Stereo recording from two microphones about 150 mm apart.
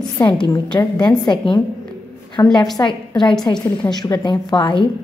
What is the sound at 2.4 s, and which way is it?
A woman's voice, 20° left (ahead or behind).